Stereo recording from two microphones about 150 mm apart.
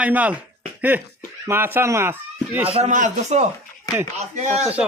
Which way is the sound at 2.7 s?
55° right (ahead or behind).